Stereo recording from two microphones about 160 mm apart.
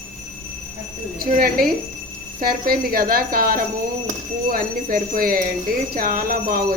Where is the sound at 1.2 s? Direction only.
65° right (ahead or behind).